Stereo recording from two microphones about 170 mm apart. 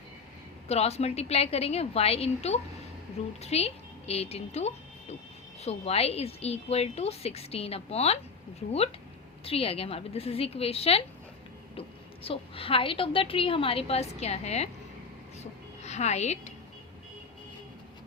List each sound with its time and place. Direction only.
0.7 s a woman's voice: 40° left (ahead or behind)
9.4 s a woman's voice: 35° left (ahead or behind)
15.4 s a sound: 40° left (ahead or behind)